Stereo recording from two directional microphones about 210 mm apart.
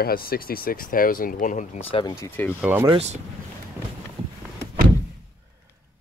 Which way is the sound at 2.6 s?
10° right (ahead or behind).